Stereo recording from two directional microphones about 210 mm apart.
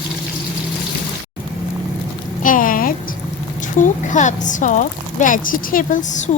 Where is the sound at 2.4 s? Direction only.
40° left (ahead or behind).